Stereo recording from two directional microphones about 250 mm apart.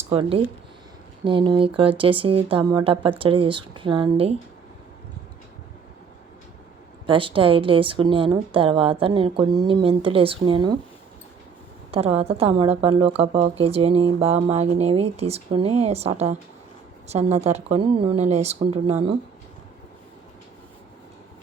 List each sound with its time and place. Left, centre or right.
0.1 s a woman's voice: right
7.1 s a woman's voice: right
11.9 s a woman's voice: right